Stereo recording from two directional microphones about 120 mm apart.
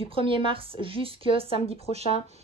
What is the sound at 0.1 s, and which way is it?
A woman's voice, 50° right (ahead or behind).